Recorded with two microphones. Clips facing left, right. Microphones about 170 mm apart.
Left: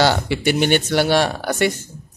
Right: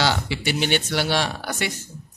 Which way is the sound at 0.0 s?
50° left (ahead or behind).